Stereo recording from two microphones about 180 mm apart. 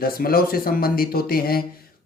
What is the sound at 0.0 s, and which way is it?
Speech, 55° left (ahead or behind).